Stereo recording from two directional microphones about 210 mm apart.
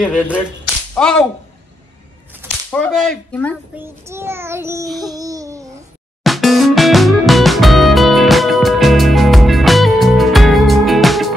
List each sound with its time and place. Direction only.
0.0 s speech: 5° left (ahead or behind)
2.7 s speech: 5° left (ahead or behind)
3.7 s child singing: 10° right (ahead or behind)
4.8 s speech: centre (ahead or behind)
5.1 s babbling: 15° right (ahead or behind)
6.2 s music: centre (ahead or behind)